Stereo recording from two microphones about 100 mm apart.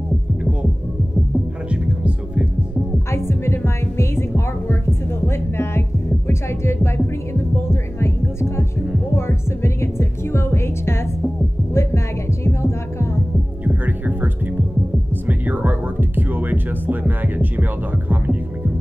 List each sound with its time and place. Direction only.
1.7 s music: 10° right (ahead or behind)
3.1 s music: 25° left (ahead or behind)
8.0 s heart sounds: 25° left (ahead or behind)
9.1 s music: 25° left (ahead or behind)
11.7 s heart sounds: 30° left (ahead or behind)
13.7 s heart sounds: 20° right (ahead or behind)
15.2 s music: 15° right (ahead or behind)